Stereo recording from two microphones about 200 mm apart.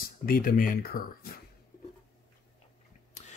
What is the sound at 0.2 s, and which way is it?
Speech, 45° left (ahead or behind).